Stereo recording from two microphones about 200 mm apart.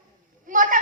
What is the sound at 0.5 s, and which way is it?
Speech, 40° right (ahead or behind).